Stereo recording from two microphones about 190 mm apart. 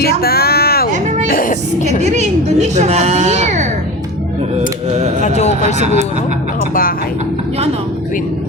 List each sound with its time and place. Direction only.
0.0 s a sound: 55° left (ahead or behind)
1.3 s speech: 45° left (ahead or behind)
2.0 s a child's voice: 35° right (ahead or behind)
5.2 s speech: 35° left (ahead or behind)
5.8 s a child's voice: 35° right (ahead or behind)